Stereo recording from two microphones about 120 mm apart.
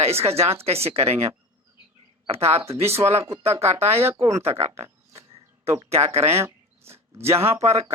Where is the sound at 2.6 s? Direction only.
20° right (ahead or behind).